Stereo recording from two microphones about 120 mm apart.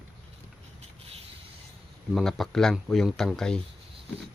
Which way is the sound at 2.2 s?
Centre (ahead or behind).